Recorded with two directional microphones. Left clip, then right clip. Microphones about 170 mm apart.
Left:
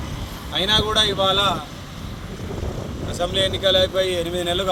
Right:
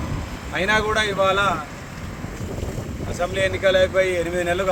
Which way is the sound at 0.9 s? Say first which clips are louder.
Left 2 dB; 10° left (ahead or behind).